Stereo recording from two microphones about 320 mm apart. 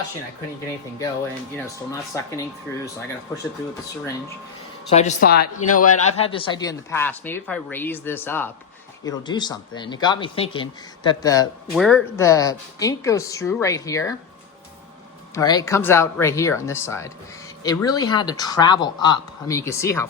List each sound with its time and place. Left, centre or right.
1.5 s speech: centre
4.9 s speech: left
15.4 s speech: centre